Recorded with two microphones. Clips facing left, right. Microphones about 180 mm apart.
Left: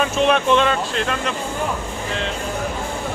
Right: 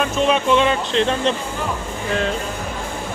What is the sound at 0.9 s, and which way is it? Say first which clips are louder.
Speech: right 5 dB; 30° right (ahead or behind).